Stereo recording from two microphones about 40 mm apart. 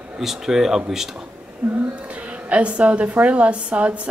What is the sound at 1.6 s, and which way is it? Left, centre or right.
A woman's voice, right.